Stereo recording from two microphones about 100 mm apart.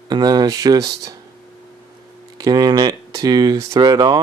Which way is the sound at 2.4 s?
40° right (ahead or behind).